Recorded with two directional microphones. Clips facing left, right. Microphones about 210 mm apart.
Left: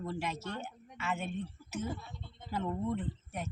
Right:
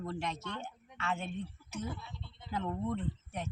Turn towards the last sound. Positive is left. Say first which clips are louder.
# even
turn(degrees=5)  # may be behind; listen again after turning